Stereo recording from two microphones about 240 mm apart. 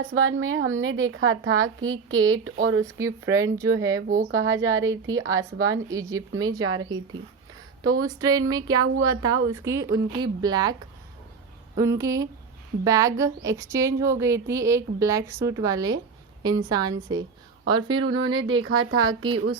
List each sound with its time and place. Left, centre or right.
0.1 s a woman's voice: right
2.8 s a woman's voice: centre
4.3 s a woman's voice: right
4.5 s a woman's voice: centre
5.5 s a woman's voice: right
5.9 s a woman's voice: centre
6.6 s a woman's voice: right
6.8 s a woman's voice: centre
11.8 s a woman's voice: centre
17.9 s a woman's voice: right
19.0 s a woman's voice: centre